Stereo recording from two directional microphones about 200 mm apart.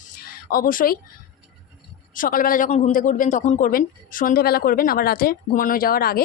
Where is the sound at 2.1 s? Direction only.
45° left (ahead or behind).